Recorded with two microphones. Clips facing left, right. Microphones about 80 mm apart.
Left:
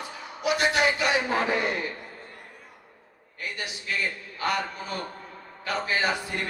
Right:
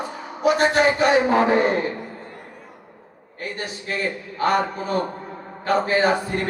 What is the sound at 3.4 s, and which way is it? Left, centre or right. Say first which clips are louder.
A man's voice: right 5 dB; right.